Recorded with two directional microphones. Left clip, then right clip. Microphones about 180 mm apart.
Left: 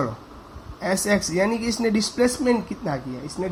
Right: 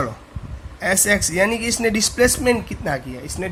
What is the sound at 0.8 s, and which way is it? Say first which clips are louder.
Speech: right 4 dB; 20° right (ahead or behind).